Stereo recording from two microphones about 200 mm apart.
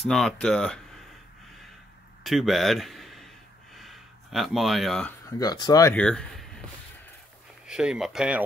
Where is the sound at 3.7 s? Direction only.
Centre (ahead or behind).